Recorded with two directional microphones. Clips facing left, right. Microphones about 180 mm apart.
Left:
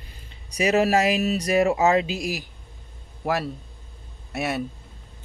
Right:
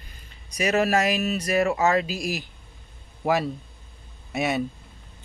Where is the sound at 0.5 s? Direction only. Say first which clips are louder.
Left 2 dB; 35° left (ahead or behind).